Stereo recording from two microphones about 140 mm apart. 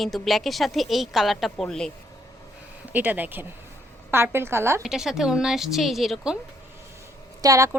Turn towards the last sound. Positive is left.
turn(degrees=-25)  # may be behind; listen again after turning